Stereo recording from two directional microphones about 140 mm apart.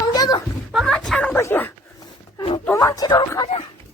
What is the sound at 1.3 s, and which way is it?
Dog, 15° left (ahead or behind).